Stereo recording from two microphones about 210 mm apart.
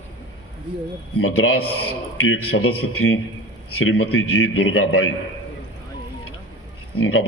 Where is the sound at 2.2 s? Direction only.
90° left.